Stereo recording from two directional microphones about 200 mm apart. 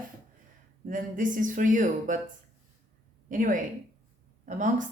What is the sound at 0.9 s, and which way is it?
Speech, 40° right (ahead or behind).